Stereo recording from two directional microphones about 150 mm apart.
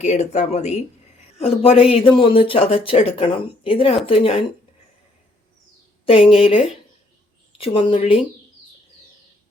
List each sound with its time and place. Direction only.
0.0 s speech: 45° left (ahead or behind)
6.1 s speech: 35° left (ahead or behind)